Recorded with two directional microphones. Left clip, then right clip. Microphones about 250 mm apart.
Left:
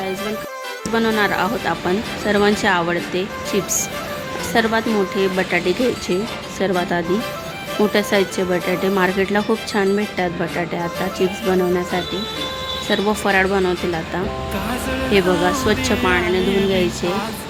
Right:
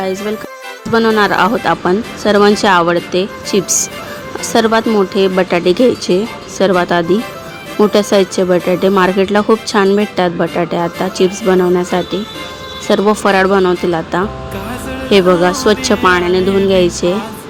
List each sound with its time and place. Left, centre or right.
0.0 s speech: centre